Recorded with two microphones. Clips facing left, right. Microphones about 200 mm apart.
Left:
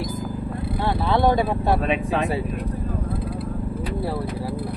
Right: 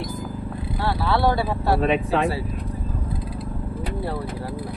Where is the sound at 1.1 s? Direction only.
20° left (ahead or behind).